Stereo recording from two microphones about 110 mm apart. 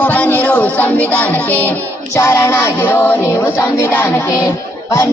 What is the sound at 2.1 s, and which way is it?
Music, 25° left (ahead or behind).